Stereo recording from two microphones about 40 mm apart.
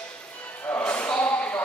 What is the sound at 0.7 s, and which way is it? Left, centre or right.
Music, left.